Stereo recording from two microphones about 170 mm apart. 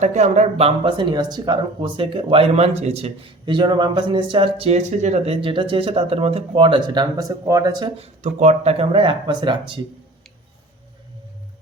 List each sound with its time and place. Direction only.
0.0 s speech: 45° right (ahead or behind)
0.9 s speech: 25° right (ahead or behind)
7.9 s speech: 40° right (ahead or behind)